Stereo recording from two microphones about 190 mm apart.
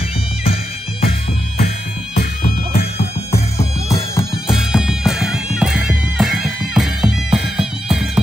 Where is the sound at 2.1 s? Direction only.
35° left (ahead or behind).